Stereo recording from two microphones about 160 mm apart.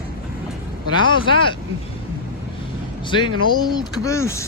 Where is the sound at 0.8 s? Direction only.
30° left (ahead or behind).